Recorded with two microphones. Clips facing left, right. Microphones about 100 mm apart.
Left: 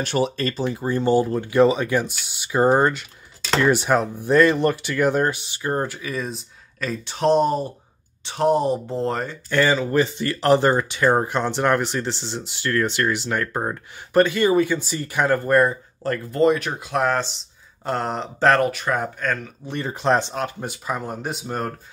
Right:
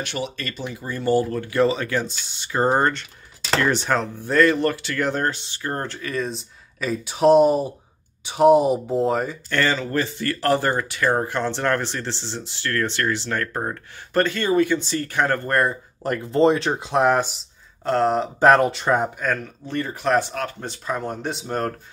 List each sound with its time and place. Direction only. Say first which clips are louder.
0.0 s speech: left 7 dB; 35° left (ahead or behind); by 9.4 s 5° right (ahead or behind)
9.5 s speech: left 4 dB; 15° left (ahead or behind)
16.0 s speech: right 1 dB; 15° right (ahead or behind)
18.7 s speech: right 3 dB; 25° right (ahead or behind)
19.1 s speech: right 1 dB; 5° right (ahead or behind)
19.7 s speech: even; 20° left (ahead or behind)
20.6 s speech: right 1 dB; 10° left (ahead or behind)